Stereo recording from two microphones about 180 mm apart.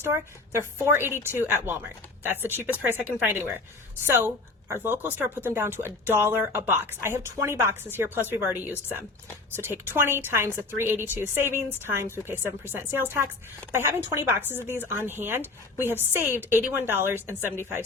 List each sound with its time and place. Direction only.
0.0 s speech: 15° right (ahead or behind)